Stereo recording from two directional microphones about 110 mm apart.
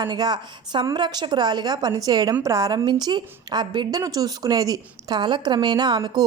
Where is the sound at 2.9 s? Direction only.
40° right (ahead or behind).